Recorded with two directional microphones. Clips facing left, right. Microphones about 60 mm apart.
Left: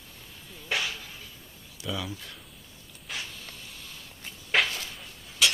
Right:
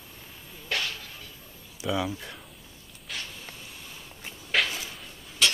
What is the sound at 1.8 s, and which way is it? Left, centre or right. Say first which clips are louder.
Speech: right 6 dB; right.